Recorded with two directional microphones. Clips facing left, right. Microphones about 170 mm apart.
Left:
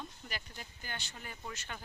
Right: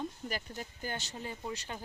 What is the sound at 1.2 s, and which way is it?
Speech, 25° right (ahead or behind).